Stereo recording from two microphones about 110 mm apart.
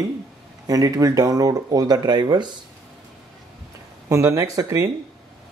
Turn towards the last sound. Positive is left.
turn(degrees=-30)  # may be behind; listen again after turning